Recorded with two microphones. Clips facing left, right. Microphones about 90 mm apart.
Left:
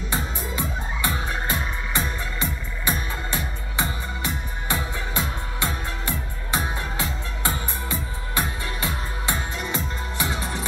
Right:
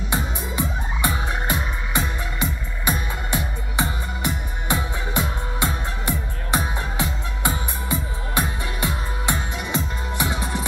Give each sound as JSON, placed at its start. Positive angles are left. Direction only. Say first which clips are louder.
{"t": 0.1, "sound": "music", "louder": "right 2 dB", "side_deg": -20}